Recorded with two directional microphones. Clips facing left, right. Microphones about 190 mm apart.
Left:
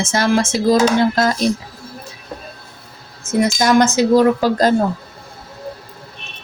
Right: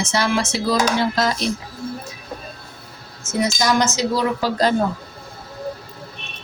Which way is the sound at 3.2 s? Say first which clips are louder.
Left 5 dB; 55° left (ahead or behind).